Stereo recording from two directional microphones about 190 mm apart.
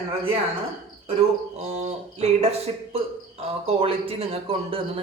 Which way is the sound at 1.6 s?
35° right (ahead or behind).